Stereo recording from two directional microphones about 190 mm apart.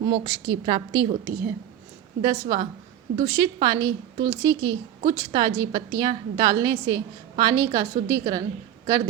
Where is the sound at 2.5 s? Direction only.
20° right (ahead or behind).